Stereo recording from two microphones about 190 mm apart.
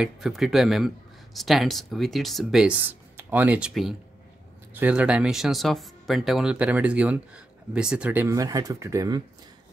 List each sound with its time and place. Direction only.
0.0 s speech: centre (ahead or behind); by 9.2 s 15° right (ahead or behind)